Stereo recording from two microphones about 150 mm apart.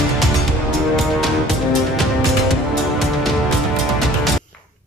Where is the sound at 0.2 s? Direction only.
Centre (ahead or behind).